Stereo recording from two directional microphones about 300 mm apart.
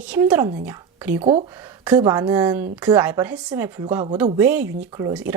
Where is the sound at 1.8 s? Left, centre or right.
Centre.